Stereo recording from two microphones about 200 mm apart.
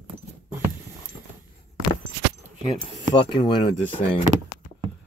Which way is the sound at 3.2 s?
25° left (ahead or behind).